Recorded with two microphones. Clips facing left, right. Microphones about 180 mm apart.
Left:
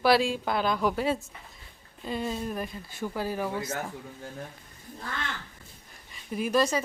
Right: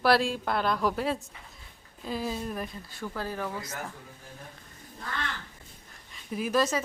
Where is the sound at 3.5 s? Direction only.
25° left (ahead or behind).